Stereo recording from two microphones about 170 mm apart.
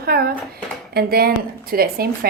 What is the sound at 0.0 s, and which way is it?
Dishes, 65° right (ahead or behind).